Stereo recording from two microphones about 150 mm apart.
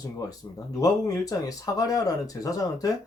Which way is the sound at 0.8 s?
25° left (ahead or behind).